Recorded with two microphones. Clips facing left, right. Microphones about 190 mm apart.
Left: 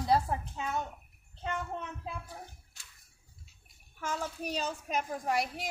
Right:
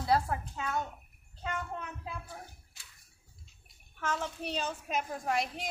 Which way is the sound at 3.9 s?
10° left (ahead or behind).